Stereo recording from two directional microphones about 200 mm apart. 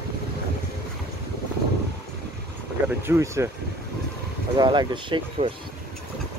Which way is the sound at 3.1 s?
15° right (ahead or behind).